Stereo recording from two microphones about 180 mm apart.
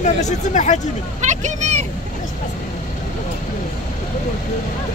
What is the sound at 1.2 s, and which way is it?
Vehicle, 40° right (ahead or behind).